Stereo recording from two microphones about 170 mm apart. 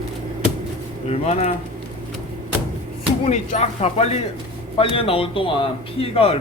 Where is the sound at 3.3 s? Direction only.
40° left (ahead or behind).